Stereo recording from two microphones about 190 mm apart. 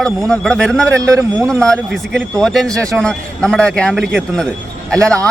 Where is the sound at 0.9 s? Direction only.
15° right (ahead or behind).